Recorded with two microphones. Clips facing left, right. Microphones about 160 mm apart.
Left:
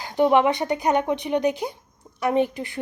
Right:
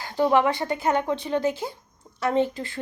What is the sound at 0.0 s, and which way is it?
Speech, 20° left (ahead or behind).